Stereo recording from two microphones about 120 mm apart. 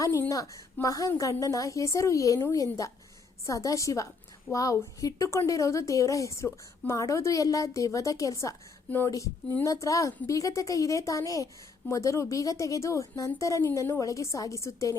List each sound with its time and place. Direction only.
0.2 s a woman's voice: 25° left (ahead or behind)